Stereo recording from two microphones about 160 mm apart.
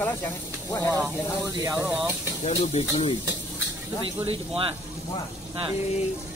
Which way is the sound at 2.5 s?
40° left (ahead or behind).